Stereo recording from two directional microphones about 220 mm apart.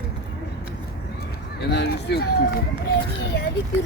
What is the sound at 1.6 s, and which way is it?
Speech, 50° left (ahead or behind).